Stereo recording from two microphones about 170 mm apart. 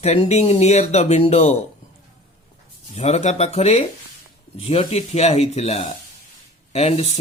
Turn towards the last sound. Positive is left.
turn(degrees=35)  # may be behind; listen again after turning